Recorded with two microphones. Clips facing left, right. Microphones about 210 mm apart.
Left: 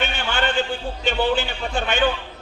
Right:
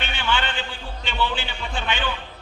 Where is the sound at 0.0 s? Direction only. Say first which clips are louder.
Left 2 dB; 45° left (ahead or behind).